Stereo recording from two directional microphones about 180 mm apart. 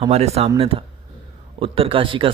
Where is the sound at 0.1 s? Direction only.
35° right (ahead or behind).